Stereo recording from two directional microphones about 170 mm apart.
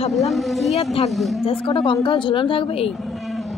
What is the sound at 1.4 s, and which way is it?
Speech, 35° left (ahead or behind).